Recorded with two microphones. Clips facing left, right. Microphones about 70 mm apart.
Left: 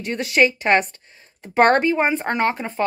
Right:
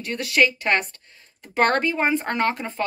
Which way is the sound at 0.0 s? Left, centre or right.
Left.